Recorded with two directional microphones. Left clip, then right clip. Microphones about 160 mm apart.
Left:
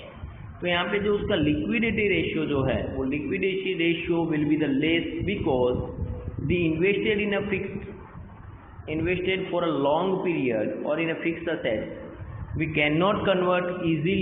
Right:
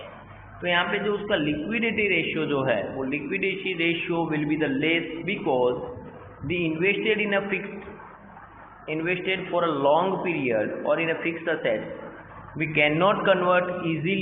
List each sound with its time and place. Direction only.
0.6 s a man's voice: 35° left (ahead or behind)
8.9 s a man's voice: 30° left (ahead or behind)